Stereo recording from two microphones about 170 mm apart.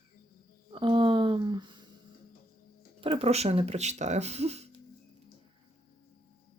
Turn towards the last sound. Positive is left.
turn(degrees=-40)  # may be behind; listen again after turning